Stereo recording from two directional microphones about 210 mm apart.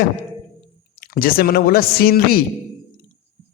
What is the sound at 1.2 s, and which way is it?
A man's voice, 45° left (ahead or behind).